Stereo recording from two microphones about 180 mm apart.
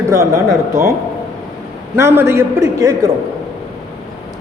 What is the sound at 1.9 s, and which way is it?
A man's voice, 15° right (ahead or behind).